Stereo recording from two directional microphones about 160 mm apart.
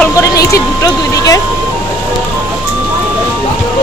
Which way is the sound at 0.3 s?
20° left (ahead or behind).